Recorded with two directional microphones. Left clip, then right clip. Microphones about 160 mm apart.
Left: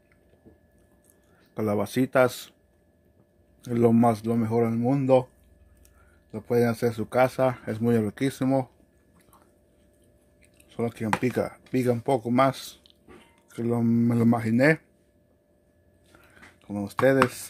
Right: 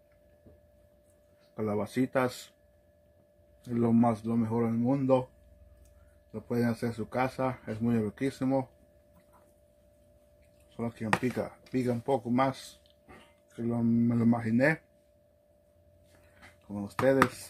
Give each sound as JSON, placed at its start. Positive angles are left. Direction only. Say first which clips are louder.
{"t": 1.5, "sound": "speech", "louder": "left 6 dB", "side_deg": 85}
{"t": 3.6, "sound": "speech", "louder": "left 6 dB", "side_deg": 80}
{"t": 6.3, "sound": "speech", "louder": "left 8 dB", "side_deg": 85}
{"t": 10.8, "sound": "speech", "louder": "left 4 dB", "side_deg": 85}
{"t": 16.6, "sound": "speech", "louder": "left 5 dB", "side_deg": 80}